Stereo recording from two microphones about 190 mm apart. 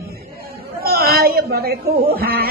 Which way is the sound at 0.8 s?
55° right (ahead or behind).